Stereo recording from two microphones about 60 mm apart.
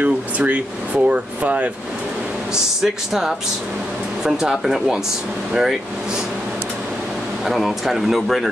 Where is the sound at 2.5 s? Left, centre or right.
Centre.